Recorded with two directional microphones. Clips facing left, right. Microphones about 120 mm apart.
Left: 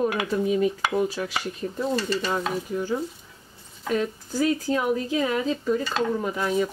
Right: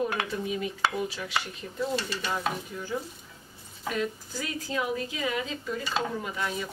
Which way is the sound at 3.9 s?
35° left (ahead or behind).